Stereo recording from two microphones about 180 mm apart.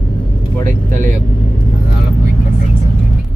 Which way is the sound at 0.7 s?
45° right (ahead or behind).